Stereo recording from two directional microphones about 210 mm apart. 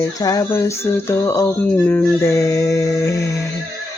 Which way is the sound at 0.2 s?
15° left (ahead or behind).